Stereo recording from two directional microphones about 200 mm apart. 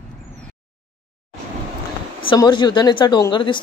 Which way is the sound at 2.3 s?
20° left (ahead or behind).